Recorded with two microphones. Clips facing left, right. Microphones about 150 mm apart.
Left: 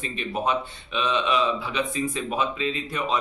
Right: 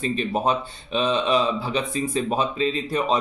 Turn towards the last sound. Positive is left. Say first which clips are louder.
# right 5 dB
turn(degrees=-35)  # may be behind; listen again after turning